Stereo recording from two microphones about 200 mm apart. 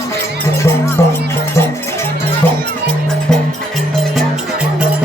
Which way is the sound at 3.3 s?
5° left (ahead or behind).